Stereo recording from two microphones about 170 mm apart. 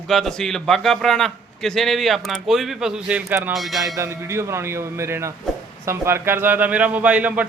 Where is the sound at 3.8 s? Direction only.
15° right (ahead or behind).